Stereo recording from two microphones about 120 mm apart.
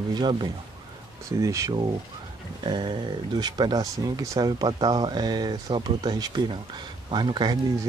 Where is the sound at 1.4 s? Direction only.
25° right (ahead or behind).